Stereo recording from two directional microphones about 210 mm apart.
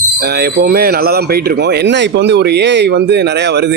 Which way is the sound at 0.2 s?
50° right (ahead or behind).